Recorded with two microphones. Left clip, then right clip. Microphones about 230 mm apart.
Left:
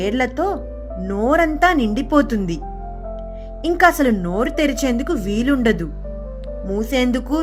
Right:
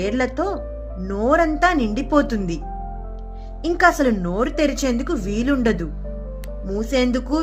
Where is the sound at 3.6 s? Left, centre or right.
Left.